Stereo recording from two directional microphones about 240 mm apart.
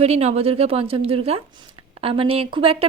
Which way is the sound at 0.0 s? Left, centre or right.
Right.